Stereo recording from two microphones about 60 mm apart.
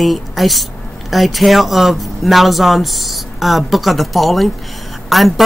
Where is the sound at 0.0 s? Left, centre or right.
Centre.